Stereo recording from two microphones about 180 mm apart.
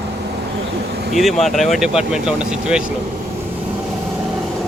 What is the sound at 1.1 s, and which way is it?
Speech, centre (ahead or behind).